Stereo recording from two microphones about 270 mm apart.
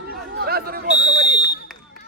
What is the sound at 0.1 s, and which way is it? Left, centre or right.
Chatter, right.